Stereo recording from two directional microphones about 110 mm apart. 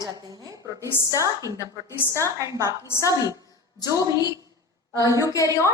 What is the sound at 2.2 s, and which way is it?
Speech, 30° right (ahead or behind).